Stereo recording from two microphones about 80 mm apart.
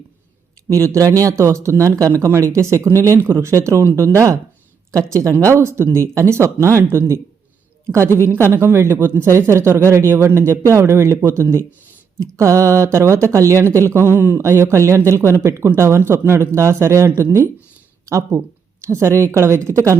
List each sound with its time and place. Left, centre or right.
0.7 s speech: right
6.8 s speech: right
7.9 s a woman's voice: right